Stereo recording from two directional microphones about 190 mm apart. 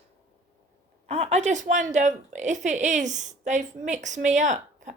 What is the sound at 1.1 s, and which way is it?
A woman's voice, 35° right (ahead or behind).